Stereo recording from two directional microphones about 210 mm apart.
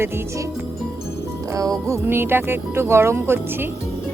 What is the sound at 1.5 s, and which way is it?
Speech, 15° right (ahead or behind).